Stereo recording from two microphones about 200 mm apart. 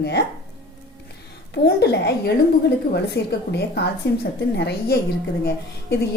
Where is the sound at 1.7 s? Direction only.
55° left (ahead or behind).